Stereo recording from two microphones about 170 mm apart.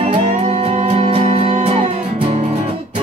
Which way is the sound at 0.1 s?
40° right (ahead or behind).